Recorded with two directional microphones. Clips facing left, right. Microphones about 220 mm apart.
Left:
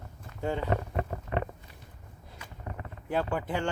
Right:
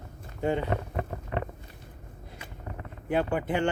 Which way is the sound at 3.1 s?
20° right (ahead or behind).